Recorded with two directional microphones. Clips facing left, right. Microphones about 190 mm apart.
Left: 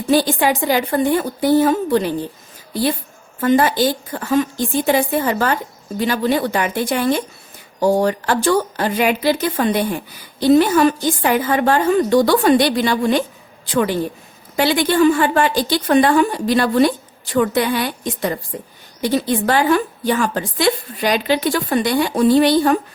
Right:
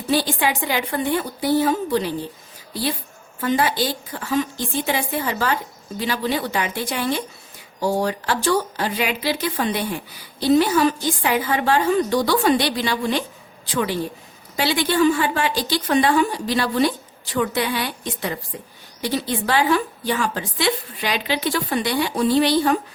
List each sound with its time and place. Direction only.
0.1 s a woman's voice: 45° left (ahead or behind)
3.4 s a woman's voice: 50° left (ahead or behind)
14.5 s a woman's voice: 50° left (ahead or behind)